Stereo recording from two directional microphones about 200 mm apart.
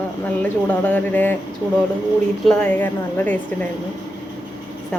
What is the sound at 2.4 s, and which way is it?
Speech, 5° left (ahead or behind).